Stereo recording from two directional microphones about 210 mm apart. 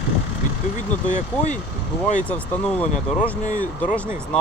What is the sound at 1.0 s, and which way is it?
Speech, 35° left (ahead or behind).